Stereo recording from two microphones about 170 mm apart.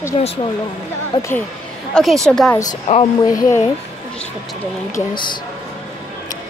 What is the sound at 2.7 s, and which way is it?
Speech, 35° left (ahead or behind).